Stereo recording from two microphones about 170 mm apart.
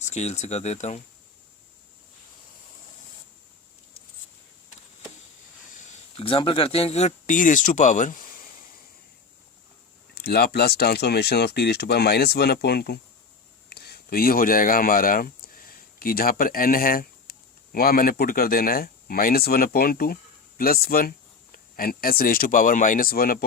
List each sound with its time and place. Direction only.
0.0 s speech: 40° left (ahead or behind)
6.1 s speech: 30° left (ahead or behind); by 8.4 s 50° left (ahead or behind)
10.2 s speech: 70° left (ahead or behind)